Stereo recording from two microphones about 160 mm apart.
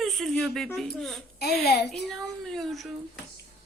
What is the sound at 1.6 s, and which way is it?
Speech, 90° left.